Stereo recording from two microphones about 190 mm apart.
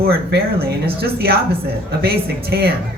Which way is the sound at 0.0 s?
55° right (ahead or behind).